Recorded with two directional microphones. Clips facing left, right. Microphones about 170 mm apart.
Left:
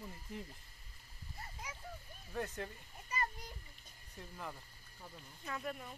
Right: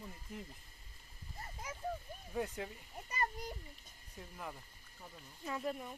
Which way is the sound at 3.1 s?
50° right (ahead or behind).